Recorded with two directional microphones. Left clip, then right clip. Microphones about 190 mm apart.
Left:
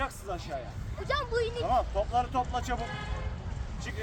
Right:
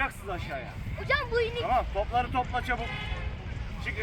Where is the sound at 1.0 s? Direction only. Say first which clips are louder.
Right 3 dB; 5° right (ahead or behind).